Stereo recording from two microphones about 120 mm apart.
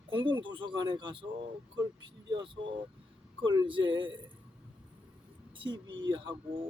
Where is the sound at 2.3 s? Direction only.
40° right (ahead or behind).